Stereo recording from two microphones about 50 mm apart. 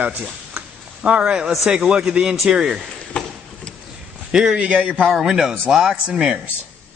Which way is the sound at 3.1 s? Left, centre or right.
Centre.